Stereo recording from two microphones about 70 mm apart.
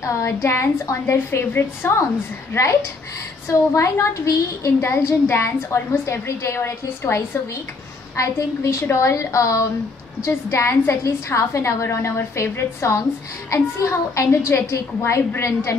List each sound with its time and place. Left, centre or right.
0.0 s a woman's voice: left